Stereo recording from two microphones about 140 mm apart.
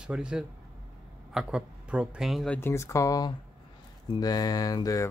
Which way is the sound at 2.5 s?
15° left (ahead or behind).